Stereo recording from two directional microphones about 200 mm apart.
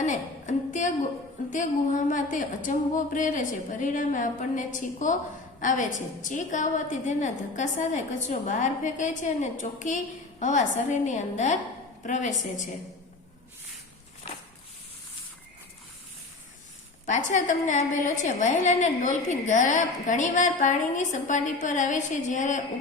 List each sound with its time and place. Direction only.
0.0 s a sound: 40° left (ahead or behind)
1.5 s a woman's voice: 40° left (ahead or behind)
17.1 s a woman's voice: 40° left (ahead or behind)